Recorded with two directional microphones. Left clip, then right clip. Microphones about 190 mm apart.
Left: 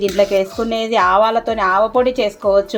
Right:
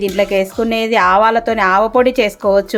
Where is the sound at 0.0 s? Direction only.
15° right (ahead or behind).